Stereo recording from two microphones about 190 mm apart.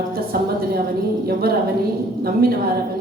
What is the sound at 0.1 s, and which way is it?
Speech, 50° right (ahead or behind).